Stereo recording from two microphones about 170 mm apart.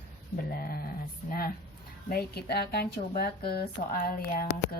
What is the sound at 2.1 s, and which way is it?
A woman's voice, 65° left (ahead or behind).